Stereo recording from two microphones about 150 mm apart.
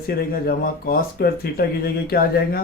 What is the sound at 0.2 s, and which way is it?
Speech, 85° left.